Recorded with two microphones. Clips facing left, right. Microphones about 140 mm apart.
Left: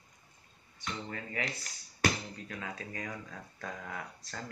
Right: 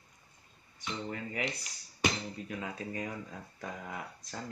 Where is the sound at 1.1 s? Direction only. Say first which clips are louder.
Right 2 dB; 20° right (ahead or behind).